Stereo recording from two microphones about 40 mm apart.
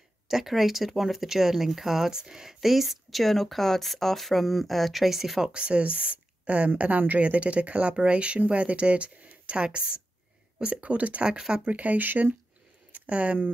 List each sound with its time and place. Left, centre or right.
0.3 s speech: centre
5.4 s speech: right
10.7 s speech: right
11.2 s speech: right
11.6 s speech: right
12.9 s a sound: right